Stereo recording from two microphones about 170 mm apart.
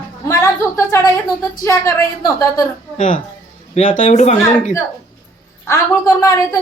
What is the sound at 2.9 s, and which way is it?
Speech, 50° left (ahead or behind).